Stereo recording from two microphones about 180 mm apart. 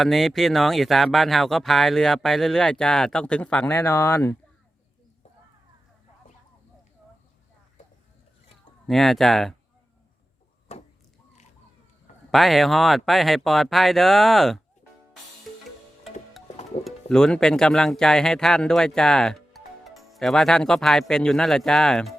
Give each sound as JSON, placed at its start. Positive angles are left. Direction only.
{"t": 0.0, "sound": "speech", "side_deg": 0}
{"t": 8.9, "sound": "speech", "side_deg": 0}
{"t": 10.7, "sound": "a sound", "side_deg": 35}
{"t": 12.3, "sound": "speech", "side_deg": 0}
{"t": 16.8, "sound": "speech", "side_deg": 5}